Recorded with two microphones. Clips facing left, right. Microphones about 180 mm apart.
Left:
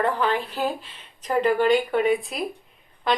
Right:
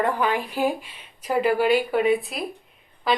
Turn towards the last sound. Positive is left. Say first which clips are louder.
# even
turn(degrees=-5)  # may be behind; listen again after turning